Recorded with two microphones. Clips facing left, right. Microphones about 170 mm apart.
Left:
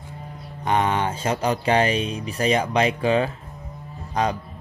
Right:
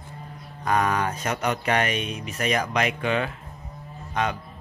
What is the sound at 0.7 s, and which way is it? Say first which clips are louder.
Speech: left 2 dB; 25° left (ahead or behind).